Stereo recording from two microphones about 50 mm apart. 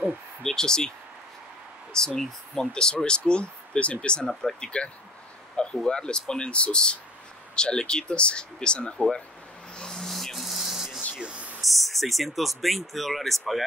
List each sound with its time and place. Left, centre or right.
0.4 s speech: centre
2.0 s speech: centre
9.8 s rub: centre
11.2 s a sound: right
11.8 s speech: centre